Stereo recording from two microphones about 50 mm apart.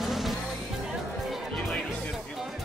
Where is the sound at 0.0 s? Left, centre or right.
Centre.